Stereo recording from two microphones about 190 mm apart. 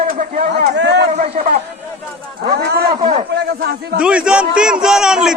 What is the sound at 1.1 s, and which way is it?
Speech, 40° right (ahead or behind).